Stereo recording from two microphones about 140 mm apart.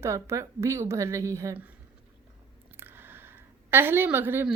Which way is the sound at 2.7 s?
15° right (ahead or behind).